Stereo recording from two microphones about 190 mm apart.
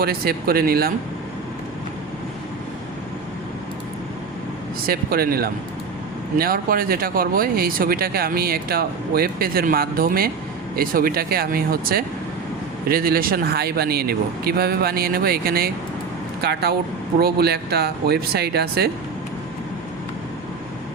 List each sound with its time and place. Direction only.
0.0 s speech: 55° right (ahead or behind)
4.9 s speech: 50° right (ahead or behind)